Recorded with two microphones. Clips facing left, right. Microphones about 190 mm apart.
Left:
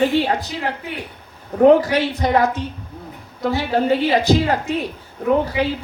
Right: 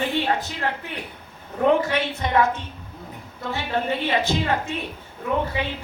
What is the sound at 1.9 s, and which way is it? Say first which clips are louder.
A woman's voice: left 4 dB; 35° left (ahead or behind).